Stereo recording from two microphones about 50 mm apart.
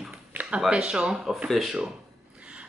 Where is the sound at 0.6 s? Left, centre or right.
Centre.